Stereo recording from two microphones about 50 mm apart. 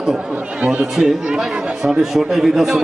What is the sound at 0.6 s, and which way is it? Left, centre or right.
Speech, right.